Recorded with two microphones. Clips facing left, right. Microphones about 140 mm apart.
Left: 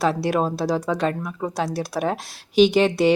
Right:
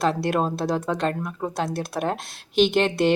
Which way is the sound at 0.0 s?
Centre (ahead or behind).